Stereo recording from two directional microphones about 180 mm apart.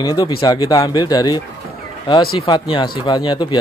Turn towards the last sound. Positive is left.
turn(degrees=25)  # may be behind; listen again after turning